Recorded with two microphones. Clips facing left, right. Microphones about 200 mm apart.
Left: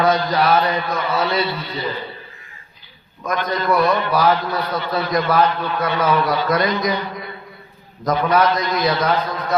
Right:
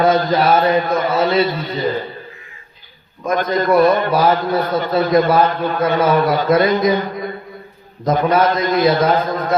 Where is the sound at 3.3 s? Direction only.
45° right (ahead or behind).